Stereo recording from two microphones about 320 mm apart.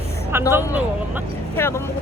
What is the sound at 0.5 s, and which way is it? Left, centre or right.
Speech, centre.